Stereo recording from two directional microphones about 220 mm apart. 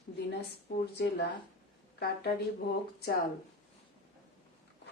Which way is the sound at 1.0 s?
45° left (ahead or behind).